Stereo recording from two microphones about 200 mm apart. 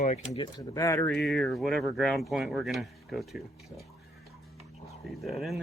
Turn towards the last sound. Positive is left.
turn(degrees=0)  # may be behind; listen again after turning